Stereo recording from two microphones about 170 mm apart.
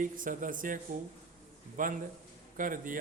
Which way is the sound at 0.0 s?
50° right (ahead or behind).